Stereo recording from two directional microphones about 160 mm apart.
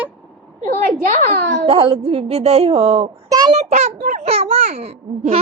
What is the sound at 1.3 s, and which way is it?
Speech, 90° right.